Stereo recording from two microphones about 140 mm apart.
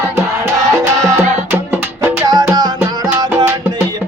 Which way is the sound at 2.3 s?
30° right (ahead or behind).